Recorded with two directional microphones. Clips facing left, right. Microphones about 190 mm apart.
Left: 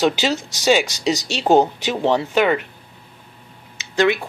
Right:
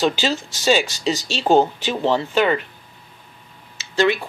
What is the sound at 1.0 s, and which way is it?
Speech, 15° left (ahead or behind).